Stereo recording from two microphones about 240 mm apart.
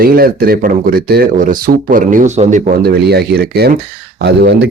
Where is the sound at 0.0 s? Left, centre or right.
Right.